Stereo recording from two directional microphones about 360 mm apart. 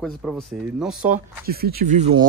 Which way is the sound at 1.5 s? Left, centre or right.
Right.